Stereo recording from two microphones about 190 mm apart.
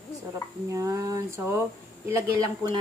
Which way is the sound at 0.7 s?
15° right (ahead or behind).